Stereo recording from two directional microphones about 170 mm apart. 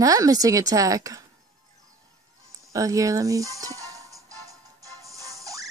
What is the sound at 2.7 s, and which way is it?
Music, 20° right (ahead or behind).